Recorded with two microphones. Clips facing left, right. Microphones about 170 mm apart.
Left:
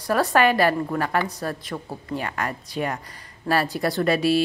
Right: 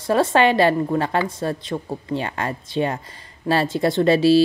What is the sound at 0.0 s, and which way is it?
A woman's voice, 25° right (ahead or behind).